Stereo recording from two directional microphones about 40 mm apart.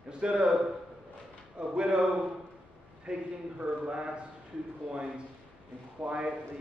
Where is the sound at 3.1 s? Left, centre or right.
Right.